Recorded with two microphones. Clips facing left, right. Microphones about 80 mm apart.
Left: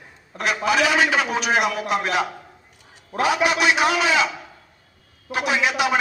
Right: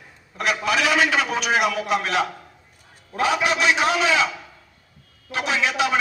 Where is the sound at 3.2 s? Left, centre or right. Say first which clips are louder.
Left 1 dB; centre.